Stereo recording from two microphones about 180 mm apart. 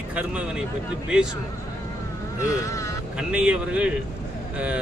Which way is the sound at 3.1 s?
5° right (ahead or behind).